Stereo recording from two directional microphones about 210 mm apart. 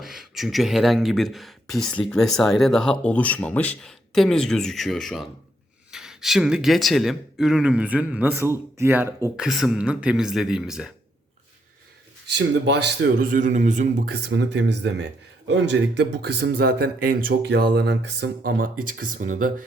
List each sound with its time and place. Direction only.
0.0 s speech: centre (ahead or behind)
12.3 s speech: 55° right (ahead or behind); by 19.6 s 40° right (ahead or behind)